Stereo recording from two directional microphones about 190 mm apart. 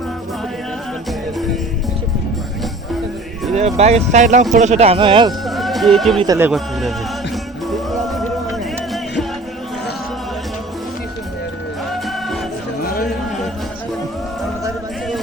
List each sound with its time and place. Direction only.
3.5 s speech: 35° right (ahead or behind)
5.5 s music: centre (ahead or behind)
6.2 s speech: 15° right (ahead or behind)
6.5 s a man's voice: centre (ahead or behind)
7.7 s music: centre (ahead or behind)
11.9 s music: centre (ahead or behind)
12.8 s music: 50° left (ahead or behind)